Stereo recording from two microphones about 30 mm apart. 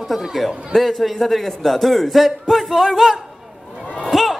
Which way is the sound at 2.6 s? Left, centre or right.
Centre.